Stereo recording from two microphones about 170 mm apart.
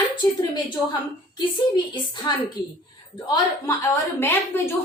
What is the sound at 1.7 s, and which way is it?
Speech, 25° left (ahead or behind).